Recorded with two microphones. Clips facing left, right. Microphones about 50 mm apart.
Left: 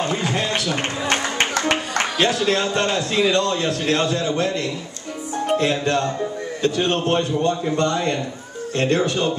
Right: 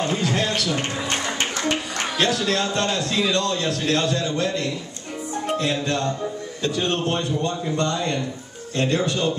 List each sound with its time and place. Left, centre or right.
0.0 s a sound: centre
0.6 s a man's voice: left
2.1 s a man's voice: left